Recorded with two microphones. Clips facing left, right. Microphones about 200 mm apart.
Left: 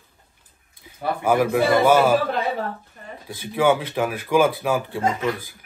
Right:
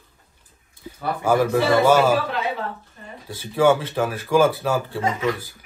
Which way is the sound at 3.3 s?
15° left (ahead or behind).